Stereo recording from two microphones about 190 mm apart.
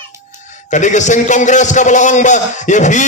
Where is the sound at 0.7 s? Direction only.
40° left (ahead or behind).